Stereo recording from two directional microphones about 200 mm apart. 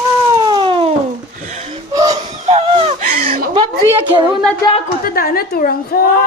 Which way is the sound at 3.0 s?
40° right (ahead or behind).